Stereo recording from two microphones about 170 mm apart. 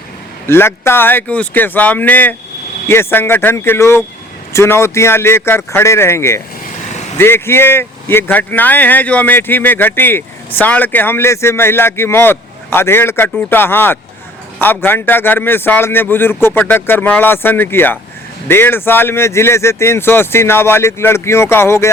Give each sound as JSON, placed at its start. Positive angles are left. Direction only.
{"t": 0.4, "sound": "speech", "side_deg": 15}
{"t": 6.9, "sound": "vehicle", "side_deg": 45}
{"t": 7.2, "sound": "speech", "side_deg": 15}